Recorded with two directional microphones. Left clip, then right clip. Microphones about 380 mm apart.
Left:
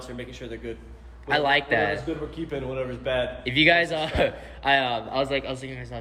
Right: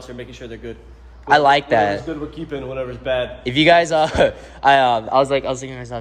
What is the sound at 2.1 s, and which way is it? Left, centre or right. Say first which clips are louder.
A man's voice: right 4 dB; right.